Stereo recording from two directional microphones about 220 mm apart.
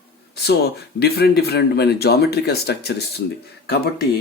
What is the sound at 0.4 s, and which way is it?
Speech, 45° left (ahead or behind).